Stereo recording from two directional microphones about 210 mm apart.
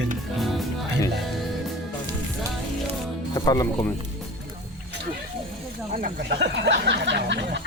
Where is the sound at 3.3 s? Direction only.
20° left (ahead or behind).